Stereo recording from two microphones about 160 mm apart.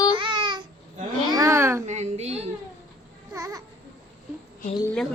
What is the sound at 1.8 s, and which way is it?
Speech, 45° right (ahead or behind).